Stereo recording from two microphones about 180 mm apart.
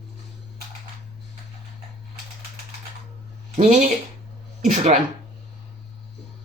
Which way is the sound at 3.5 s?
45° right (ahead or behind).